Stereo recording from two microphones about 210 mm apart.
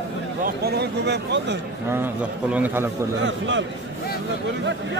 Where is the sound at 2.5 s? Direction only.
10° right (ahead or behind).